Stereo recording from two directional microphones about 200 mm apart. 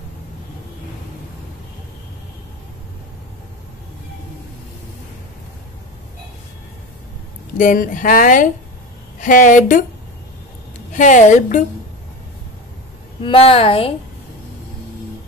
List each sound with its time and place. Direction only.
7.5 s a woman's voice: 40° left (ahead or behind)
10.9 s a woman's voice: 40° left (ahead or behind)
13.2 s a woman's voice: 30° left (ahead or behind)